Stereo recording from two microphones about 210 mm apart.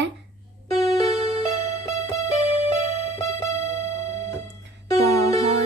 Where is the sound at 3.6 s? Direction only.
30° right (ahead or behind).